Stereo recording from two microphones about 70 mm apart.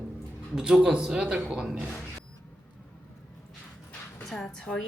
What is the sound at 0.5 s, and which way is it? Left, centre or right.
A man's voice, centre.